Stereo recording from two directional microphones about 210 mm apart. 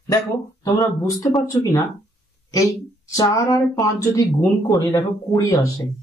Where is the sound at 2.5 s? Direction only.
15° left (ahead or behind).